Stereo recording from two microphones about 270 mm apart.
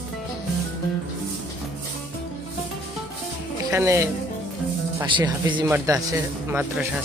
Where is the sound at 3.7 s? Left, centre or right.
Centre.